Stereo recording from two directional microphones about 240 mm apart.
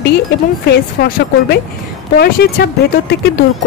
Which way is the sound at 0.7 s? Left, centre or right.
Left.